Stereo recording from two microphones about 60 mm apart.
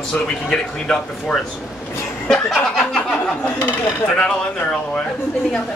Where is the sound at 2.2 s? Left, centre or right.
Centre.